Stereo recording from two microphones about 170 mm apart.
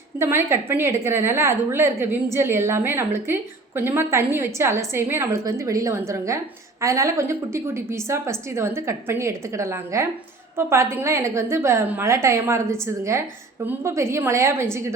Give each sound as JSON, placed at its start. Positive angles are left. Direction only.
{"t": 0.2, "sound": "a woman's voice", "side_deg": -15}